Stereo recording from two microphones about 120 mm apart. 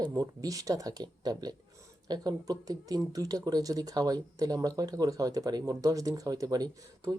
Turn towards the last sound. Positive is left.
turn(degrees=-30)  # may be behind; listen again after turning